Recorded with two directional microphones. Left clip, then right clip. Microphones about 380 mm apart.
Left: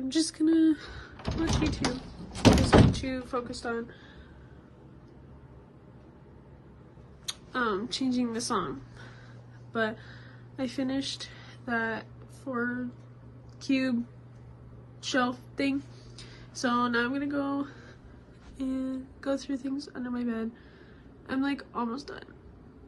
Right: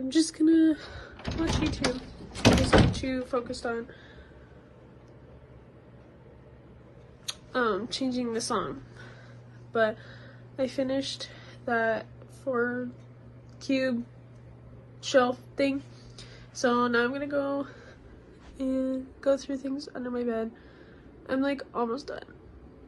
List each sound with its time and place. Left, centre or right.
0.1 s a woman's voice: centre
7.2 s a woman's voice: centre
9.7 s a sound: centre
11.6 s a woman's voice: centre